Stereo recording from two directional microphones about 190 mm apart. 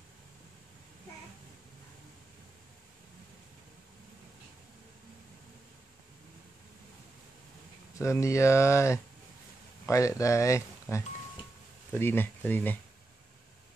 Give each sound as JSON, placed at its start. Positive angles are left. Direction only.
{"t": 8.0, "sound": "speech", "side_deg": 15}